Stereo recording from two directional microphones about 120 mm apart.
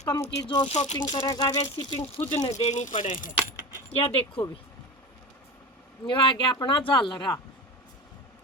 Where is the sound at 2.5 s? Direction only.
70° left (ahead or behind); by 3.2 s 90° left.